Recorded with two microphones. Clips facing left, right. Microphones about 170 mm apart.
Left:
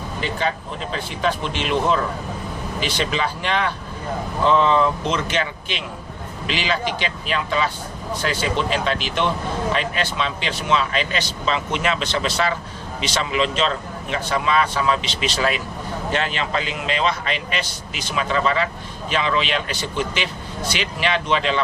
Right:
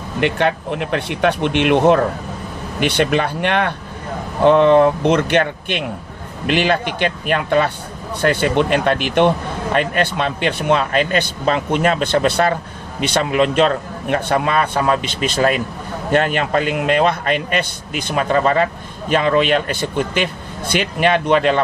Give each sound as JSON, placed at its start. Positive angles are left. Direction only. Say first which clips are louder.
{"t": 0.2, "sound": "a man's voice", "louder": "right 8 dB", "side_deg": -65}